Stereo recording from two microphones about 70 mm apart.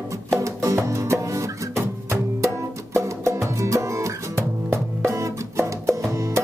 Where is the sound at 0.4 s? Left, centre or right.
Right.